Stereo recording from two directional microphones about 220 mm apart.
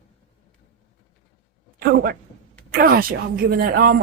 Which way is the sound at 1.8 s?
45° right (ahead or behind).